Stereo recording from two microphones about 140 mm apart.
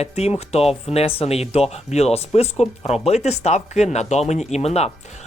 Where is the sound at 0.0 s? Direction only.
50° left (ahead or behind).